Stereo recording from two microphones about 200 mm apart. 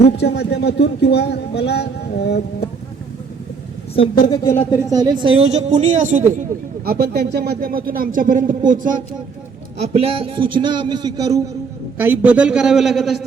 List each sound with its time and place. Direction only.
0.0 s speech: 55° left (ahead or behind)
3.9 s a woman's voice: 25° left (ahead or behind)
4.7 s a man's voice: 15° right (ahead or behind); by 6.4 s 40° right (ahead or behind)
6.8 s speech: 50° right (ahead or behind)
9.9 s a man's voice: 30° right (ahead or behind); by 13.2 s centre (ahead or behind)